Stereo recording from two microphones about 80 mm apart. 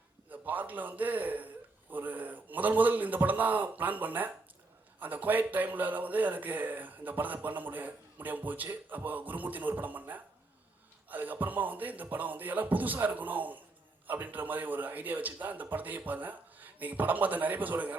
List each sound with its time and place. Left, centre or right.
0.3 s a man's voice: right